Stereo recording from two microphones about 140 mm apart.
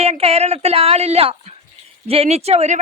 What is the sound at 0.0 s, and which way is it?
Speech, 45° right (ahead or behind).